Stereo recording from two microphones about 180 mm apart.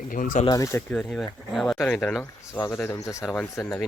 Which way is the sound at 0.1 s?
45° left (ahead or behind).